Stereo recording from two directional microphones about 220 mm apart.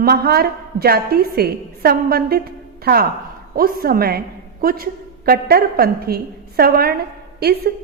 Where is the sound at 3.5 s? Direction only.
40° right (ahead or behind).